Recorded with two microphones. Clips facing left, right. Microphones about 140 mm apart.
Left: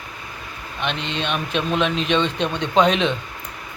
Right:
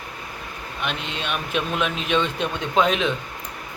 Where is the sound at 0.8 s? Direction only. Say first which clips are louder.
Left 4 dB; 5° right (ahead or behind).